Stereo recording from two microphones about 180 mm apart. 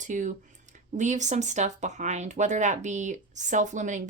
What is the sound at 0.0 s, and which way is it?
Speech, 45° right (ahead or behind).